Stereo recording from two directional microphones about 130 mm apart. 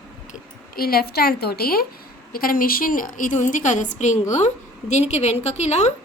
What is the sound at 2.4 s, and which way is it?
A woman's voice, 90° left.